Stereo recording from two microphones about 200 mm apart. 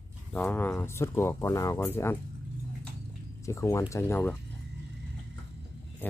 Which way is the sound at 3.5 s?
15° left (ahead or behind).